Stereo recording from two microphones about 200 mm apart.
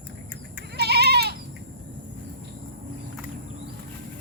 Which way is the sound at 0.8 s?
55° right (ahead or behind).